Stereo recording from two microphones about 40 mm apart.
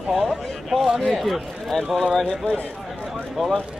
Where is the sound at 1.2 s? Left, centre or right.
Centre.